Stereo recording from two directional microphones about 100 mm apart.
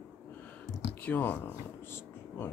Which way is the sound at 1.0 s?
20° left (ahead or behind).